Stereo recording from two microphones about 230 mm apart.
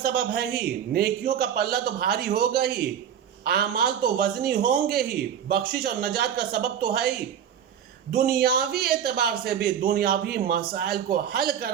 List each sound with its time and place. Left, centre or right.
0.0 s a man's voice: right
8.1 s a man's voice: right